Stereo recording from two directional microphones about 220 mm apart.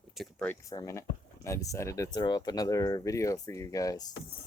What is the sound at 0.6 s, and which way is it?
Speech, 15° left (ahead or behind).